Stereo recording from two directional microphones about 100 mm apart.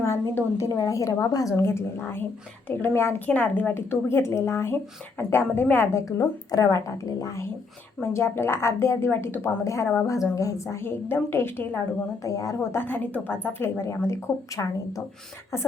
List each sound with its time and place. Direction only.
0.0 s a sound: 30° left (ahead or behind)
0.8 s a woman's voice: 35° left (ahead or behind)
12.8 s a woman's voice: 20° left (ahead or behind)